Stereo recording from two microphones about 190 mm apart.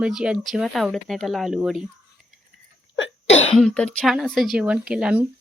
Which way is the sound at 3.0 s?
75° left (ahead or behind).